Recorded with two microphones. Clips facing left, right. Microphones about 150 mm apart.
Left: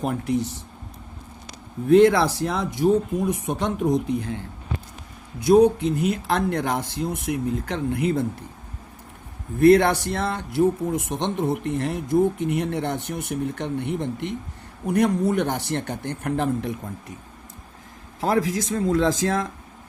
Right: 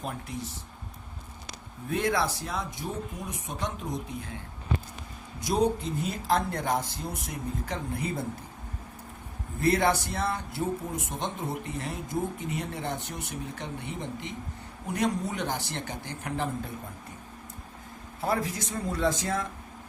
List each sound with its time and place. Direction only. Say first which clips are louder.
0.0 s speech: left 12 dB; 80° left
1.9 s speech: left 12 dB; 75° left (ahead or behind)
5.4 s speech: left 10 dB; 65° left (ahead or behind)
9.6 s speech: left 9 dB; 65° left (ahead or behind)
18.2 s a man's voice: left 7 dB; 90° left